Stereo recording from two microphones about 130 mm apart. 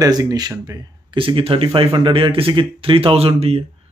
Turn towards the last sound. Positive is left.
turn(degrees=-50)  # may be behind; listen again after turning